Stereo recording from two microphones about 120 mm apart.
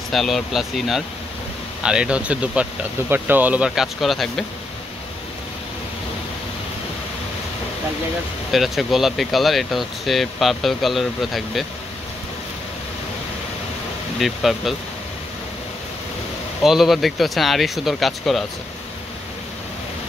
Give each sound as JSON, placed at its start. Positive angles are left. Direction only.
{"t": 0.1, "sound": "speech", "side_deg": 0}
{"t": 8.5, "sound": "speech", "side_deg": 0}
{"t": 14.2, "sound": "speech", "side_deg": 0}
{"t": 16.6, "sound": "speech", "side_deg": 0}